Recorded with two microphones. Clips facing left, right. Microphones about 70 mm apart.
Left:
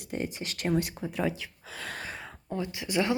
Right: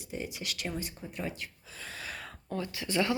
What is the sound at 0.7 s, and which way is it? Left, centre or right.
Speech, left.